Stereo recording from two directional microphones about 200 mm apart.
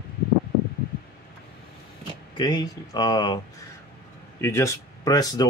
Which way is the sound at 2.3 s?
20° left (ahead or behind).